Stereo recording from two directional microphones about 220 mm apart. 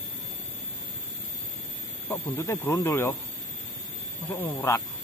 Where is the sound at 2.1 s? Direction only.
10° left (ahead or behind).